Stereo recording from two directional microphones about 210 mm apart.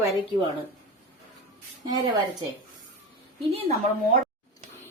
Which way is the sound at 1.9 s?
20° right (ahead or behind).